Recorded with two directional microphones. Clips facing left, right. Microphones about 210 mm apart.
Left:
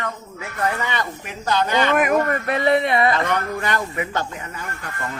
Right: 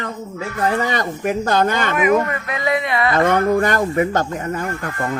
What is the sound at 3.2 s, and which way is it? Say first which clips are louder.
Speech: right 8 dB; 50° right (ahead or behind).